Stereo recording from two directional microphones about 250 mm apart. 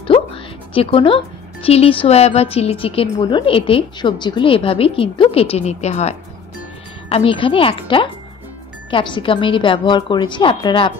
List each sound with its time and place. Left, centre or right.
0.0 s speech: left